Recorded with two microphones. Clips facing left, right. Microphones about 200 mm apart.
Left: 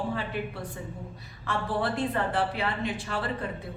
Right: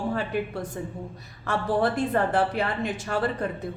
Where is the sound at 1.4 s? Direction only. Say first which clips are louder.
Right 5 dB; 45° right (ahead or behind).